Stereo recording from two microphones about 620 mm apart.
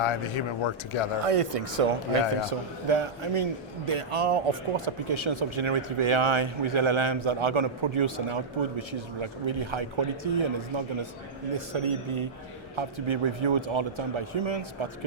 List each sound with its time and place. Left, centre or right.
0.0 s speech: left
1.2 s a man's voice: right